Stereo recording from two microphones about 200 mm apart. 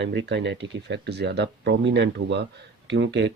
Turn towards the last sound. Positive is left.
turn(degrees=-60)  # may be behind; listen again after turning